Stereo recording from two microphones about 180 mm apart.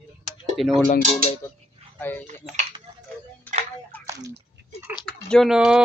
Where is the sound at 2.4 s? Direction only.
5° right (ahead or behind).